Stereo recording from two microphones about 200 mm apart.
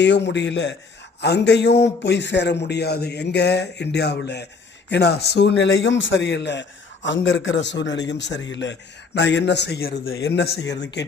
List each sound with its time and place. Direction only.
0.0 s a man's voice: 60° left (ahead or behind)